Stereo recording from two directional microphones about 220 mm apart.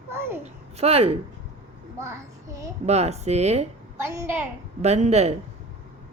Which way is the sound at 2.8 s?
30° right (ahead or behind).